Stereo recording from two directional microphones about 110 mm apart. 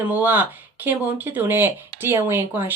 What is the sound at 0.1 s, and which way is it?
Speech, 15° right (ahead or behind).